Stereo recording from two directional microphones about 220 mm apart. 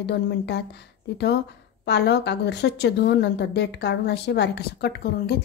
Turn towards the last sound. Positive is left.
turn(degrees=45)  # may be behind; listen again after turning